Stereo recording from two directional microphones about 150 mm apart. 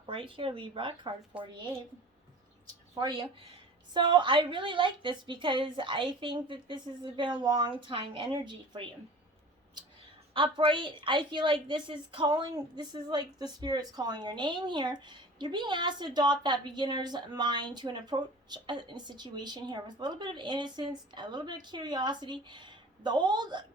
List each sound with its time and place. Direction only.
0.0 s a woman's voice: 35° right (ahead or behind)
1.3 s a woman's voice: 10° right (ahead or behind)
2.9 s a woman's voice: 30° right (ahead or behind)
10.3 s a woman's voice: 35° right (ahead or behind)